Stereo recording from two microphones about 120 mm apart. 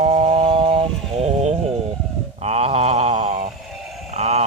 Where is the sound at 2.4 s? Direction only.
60° right (ahead or behind).